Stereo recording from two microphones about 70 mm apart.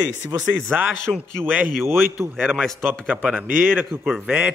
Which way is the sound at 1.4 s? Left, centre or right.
Right.